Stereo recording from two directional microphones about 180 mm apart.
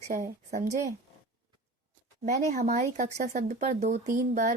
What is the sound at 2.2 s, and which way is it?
Speech, 40° right (ahead or behind).